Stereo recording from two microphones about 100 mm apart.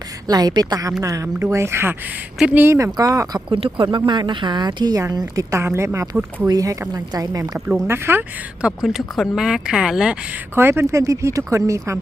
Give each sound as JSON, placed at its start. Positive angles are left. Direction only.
{"t": 0.3, "sound": "a woman's voice", "side_deg": -45}
{"t": 3.5, "sound": "a woman's voice", "side_deg": -60}
{"t": 7.9, "sound": "speech", "side_deg": -25}
{"t": 8.6, "sound": "speech", "side_deg": -5}
{"t": 10.5, "sound": "a woman's voice", "side_deg": -25}